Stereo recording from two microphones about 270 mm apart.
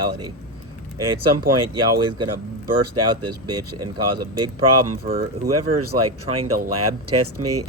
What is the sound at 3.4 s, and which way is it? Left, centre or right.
Speech, right.